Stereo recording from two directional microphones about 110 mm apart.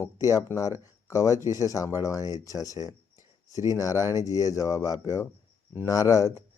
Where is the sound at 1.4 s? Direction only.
30° left (ahead or behind).